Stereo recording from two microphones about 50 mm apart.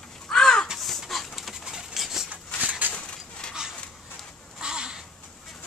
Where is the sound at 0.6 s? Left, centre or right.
Centre.